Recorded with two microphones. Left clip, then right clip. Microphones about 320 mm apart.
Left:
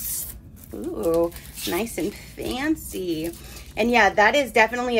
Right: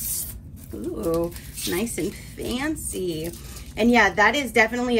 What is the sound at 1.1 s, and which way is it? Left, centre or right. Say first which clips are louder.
A woman's voice: left 3 dB; centre.